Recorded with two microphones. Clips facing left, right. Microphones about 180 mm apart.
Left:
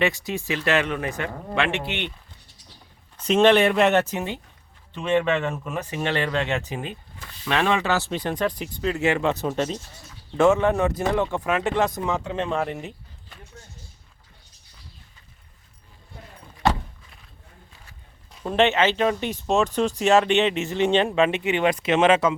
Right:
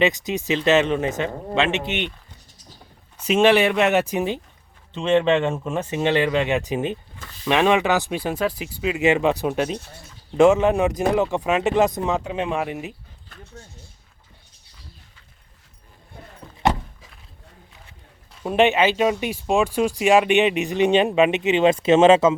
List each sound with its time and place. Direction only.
0.0 s speech: 20° right (ahead or behind)
3.2 s speech: 10° right (ahead or behind)
16.6 s a sound: 20° right (ahead or behind)
18.4 s speech: 15° right (ahead or behind)